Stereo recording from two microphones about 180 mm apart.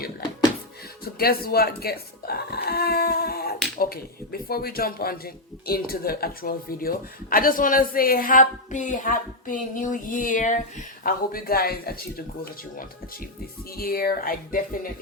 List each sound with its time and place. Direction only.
1.0 s speech: 55° left (ahead or behind)